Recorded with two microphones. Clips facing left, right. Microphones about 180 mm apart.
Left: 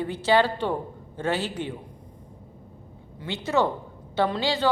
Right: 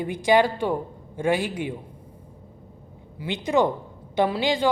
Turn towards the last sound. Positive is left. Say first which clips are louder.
# right 2 dB
turn(degrees=-15)  # may be behind; listen again after turning